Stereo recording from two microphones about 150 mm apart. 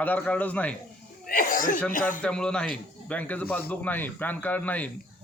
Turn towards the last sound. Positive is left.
turn(degrees=10)  # may be behind; listen again after turning